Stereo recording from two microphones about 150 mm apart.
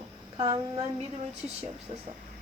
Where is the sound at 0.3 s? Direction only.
30° right (ahead or behind).